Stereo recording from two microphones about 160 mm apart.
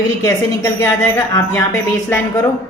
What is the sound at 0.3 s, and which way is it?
Speech, 15° left (ahead or behind).